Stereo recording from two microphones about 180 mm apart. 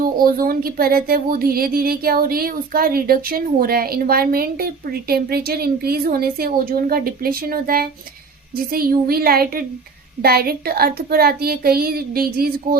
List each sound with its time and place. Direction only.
0.0 s speech: 50° right (ahead or behind)